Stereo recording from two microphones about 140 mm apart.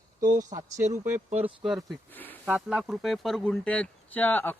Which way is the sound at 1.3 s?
45° right (ahead or behind).